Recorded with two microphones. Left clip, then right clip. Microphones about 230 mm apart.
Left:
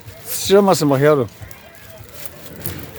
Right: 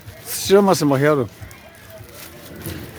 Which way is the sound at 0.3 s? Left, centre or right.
Centre.